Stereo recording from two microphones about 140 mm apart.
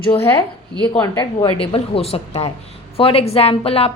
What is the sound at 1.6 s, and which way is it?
A woman's voice, 45° left (ahead or behind).